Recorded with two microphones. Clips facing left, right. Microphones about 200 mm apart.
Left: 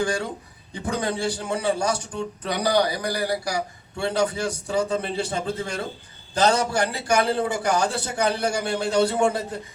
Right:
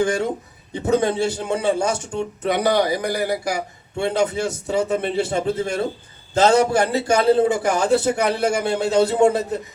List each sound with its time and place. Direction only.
0.0 s a man's voice: 20° right (ahead or behind)